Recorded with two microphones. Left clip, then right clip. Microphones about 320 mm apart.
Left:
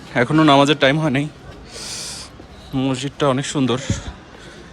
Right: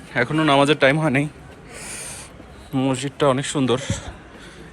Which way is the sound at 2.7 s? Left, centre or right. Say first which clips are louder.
Even; centre.